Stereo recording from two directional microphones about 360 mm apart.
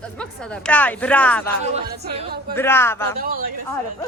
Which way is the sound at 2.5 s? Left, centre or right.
Centre.